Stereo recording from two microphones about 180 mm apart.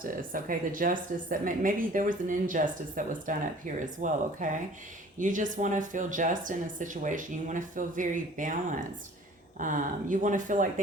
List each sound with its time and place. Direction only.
0.0 s speech: 50° right (ahead or behind)